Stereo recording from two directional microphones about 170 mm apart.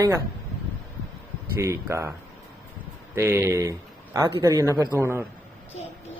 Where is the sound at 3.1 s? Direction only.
15° right (ahead or behind).